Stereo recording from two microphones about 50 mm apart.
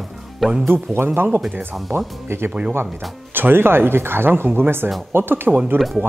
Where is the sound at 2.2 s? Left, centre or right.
Right.